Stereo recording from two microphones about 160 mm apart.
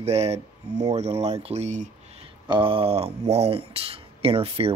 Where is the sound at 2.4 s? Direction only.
30° right (ahead or behind).